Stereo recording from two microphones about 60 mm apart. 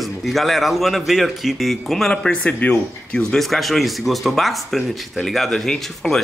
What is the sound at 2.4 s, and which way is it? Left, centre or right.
Speech, left.